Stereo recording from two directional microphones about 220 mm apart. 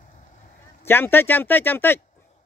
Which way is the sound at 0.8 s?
10° left (ahead or behind).